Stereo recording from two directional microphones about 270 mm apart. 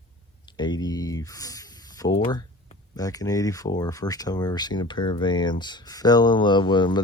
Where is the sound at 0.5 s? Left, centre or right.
Centre.